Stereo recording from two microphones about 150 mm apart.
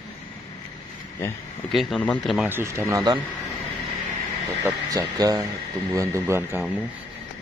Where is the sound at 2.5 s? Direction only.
15° right (ahead or behind).